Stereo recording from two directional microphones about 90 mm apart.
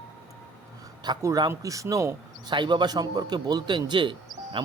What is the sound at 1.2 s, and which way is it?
Speech, 45° right (ahead or behind).